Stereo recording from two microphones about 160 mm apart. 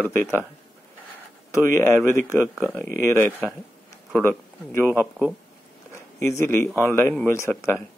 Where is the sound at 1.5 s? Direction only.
15° left (ahead or behind).